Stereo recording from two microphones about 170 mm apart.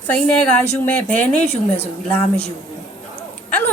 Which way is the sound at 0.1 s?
10° left (ahead or behind).